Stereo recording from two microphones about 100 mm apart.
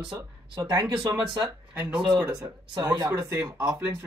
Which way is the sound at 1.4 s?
10° right (ahead or behind).